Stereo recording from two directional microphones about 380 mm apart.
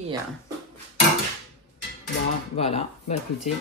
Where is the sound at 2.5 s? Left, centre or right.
Centre.